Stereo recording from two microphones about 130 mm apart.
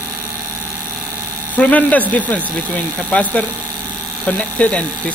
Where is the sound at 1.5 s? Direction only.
10° left (ahead or behind).